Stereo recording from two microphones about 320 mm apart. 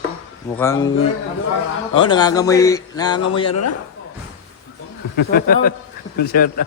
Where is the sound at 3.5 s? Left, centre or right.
Left.